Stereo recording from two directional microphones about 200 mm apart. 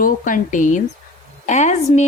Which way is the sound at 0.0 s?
40° left (ahead or behind).